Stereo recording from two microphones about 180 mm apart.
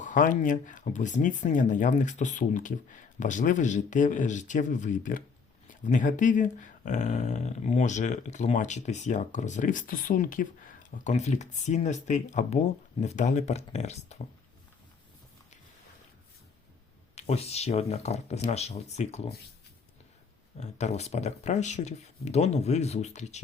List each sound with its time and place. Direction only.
0.0 s speech: 45° left (ahead or behind)
17.2 s speech: 35° left (ahead or behind)
20.6 s speech: 40° left (ahead or behind)